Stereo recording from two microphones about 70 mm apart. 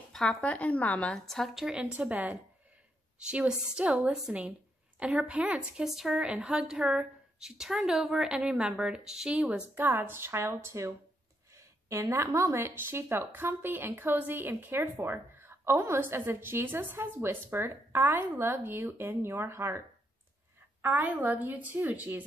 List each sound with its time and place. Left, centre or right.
0.1 s speech: centre
1.1 s a woman's voice: centre
1.7 s a woman's voice: centre
5.9 s a woman's voice: centre
9.4 s a woman's voice: right
9.8 s a woman's voice: right
20.8 s a woman's voice: right